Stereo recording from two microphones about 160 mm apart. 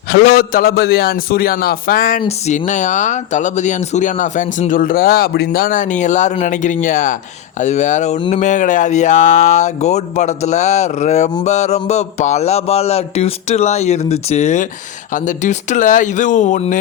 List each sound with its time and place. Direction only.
0.1 s a man's voice: 75° left (ahead or behind)
2.2 s speech: 50° left (ahead or behind)